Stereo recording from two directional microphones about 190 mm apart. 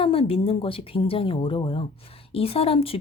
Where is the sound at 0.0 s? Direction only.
30° left (ahead or behind).